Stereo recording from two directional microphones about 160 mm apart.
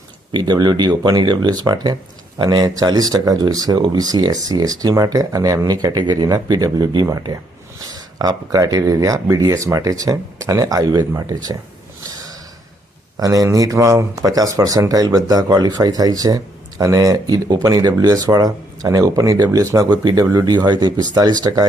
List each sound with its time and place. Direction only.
0.3 s speech: 30° right (ahead or behind)
13.1 s speech: 20° right (ahead or behind)